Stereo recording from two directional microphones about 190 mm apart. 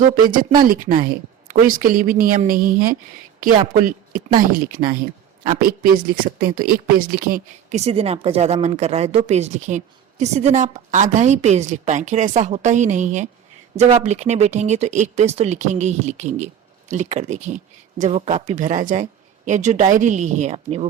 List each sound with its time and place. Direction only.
0.3 s a woman's voice: 45° right (ahead or behind)